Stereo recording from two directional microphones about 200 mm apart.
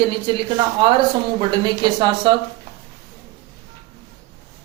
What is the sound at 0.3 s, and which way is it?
Speech, 25° right (ahead or behind).